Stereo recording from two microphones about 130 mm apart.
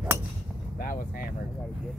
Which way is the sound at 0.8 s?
90° left.